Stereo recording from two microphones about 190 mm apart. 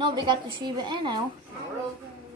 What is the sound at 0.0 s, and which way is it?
A woman's voice, 25° right (ahead or behind).